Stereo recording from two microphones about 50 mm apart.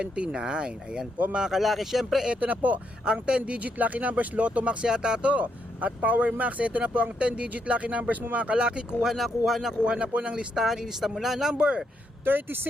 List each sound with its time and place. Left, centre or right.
0.3 s speech: centre
2.4 s speech: right
3.1 s speech: right
9.0 s speech: centre
9.8 s speech: right
10.6 s speech: centre
12.2 s speech: right